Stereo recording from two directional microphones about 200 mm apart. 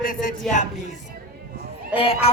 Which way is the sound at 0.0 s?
45° left (ahead or behind).